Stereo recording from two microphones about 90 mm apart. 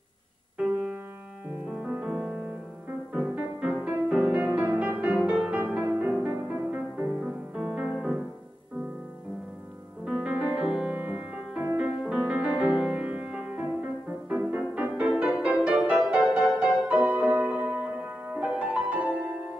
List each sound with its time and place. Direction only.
0.6 s music: 10° right (ahead or behind)
10.0 s music: 5° right (ahead or behind)
10.9 s music: 20° right (ahead or behind)